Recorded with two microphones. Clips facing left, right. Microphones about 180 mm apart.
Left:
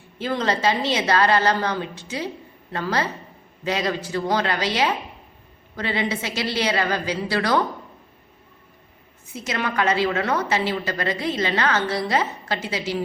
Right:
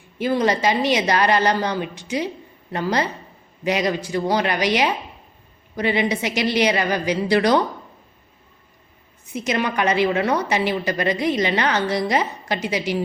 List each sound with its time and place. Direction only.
0.2 s a woman's voice: 15° right (ahead or behind)
9.3 s a woman's voice: 20° right (ahead or behind)